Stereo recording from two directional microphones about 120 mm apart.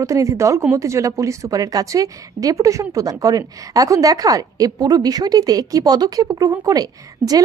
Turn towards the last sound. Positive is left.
turn(degrees=-30)  # may be behind; listen again after turning